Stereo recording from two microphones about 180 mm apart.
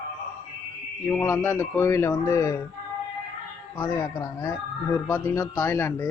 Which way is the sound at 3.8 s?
15° left (ahead or behind).